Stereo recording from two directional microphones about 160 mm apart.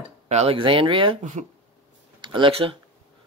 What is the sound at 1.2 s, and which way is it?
Speech, 50° right (ahead or behind).